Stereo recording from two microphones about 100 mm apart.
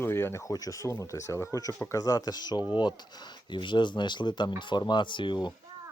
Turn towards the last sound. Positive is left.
turn(degrees=50)  # may be behind; listen again after turning